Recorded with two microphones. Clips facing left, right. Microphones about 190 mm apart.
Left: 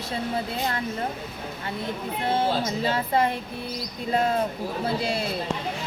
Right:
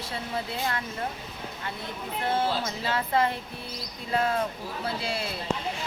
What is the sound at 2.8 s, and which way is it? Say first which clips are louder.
A woman's voice: left 1 dB; 20° left (ahead or behind).